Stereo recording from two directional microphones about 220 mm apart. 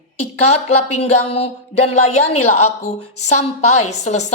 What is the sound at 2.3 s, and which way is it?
Speech, 90° left.